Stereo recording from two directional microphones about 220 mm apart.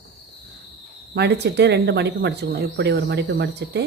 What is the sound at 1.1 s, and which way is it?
Speech, 50° right (ahead or behind).